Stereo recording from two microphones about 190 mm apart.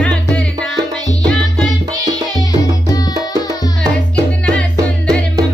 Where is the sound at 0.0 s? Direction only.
5° left (ahead or behind).